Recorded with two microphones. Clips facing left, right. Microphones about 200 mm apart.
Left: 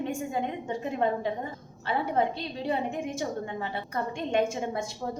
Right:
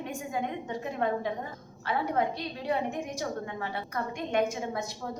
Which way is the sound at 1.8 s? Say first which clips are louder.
Left 2 dB; 25° left (ahead or behind).